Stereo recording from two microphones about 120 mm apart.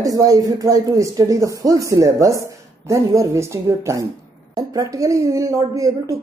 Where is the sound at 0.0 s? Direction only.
30° right (ahead or behind).